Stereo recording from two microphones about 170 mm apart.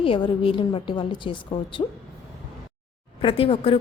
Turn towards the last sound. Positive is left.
turn(degrees=35)  # may be behind; listen again after turning